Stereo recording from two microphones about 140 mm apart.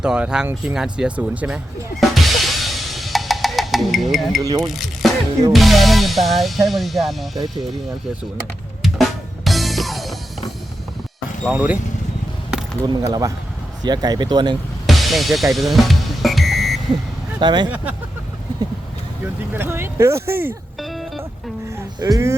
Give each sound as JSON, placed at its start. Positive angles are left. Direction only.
{"t": 0.0, "sound": "speech", "side_deg": -5}
{"t": 2.0, "sound": "music", "side_deg": 0}
{"t": 4.4, "sound": "speech", "side_deg": -25}
{"t": 4.6, "sound": "speech", "side_deg": 0}
{"t": 5.5, "sound": "music", "side_deg": 0}
{"t": 8.8, "sound": "drum", "side_deg": 0}
{"t": 11.4, "sound": "speech", "side_deg": -10}
{"t": 12.8, "sound": "speech", "side_deg": -30}
{"t": 14.8, "sound": "music", "side_deg": 0}
{"t": 17.4, "sound": "speech", "side_deg": -35}
{"t": 19.2, "sound": "speech", "side_deg": -15}
{"t": 20.8, "sound": "music", "side_deg": 0}
{"t": 21.8, "sound": "music", "side_deg": -20}